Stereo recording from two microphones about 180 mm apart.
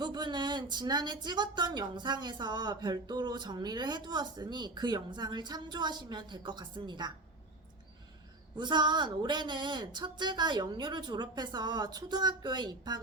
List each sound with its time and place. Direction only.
0.0 s speech: 25° right (ahead or behind)
8.5 s speech: 25° right (ahead or behind)